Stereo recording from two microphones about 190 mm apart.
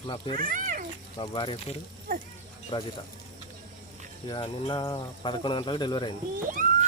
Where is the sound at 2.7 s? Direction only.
25° left (ahead or behind).